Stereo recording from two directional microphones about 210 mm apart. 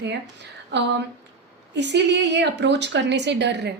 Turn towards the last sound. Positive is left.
turn(degrees=-55)  # may be behind; listen again after turning